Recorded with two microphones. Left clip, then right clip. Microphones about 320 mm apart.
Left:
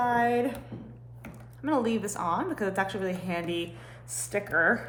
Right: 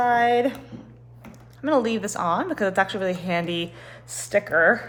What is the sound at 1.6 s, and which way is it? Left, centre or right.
A woman's voice, right.